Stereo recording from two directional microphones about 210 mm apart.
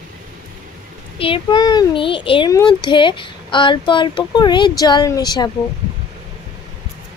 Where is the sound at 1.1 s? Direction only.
25° left (ahead or behind).